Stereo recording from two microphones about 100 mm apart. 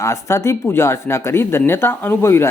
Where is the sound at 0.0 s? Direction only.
30° left (ahead or behind).